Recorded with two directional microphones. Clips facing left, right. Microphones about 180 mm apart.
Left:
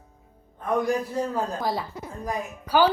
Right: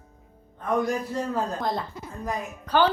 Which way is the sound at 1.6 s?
5° left (ahead or behind).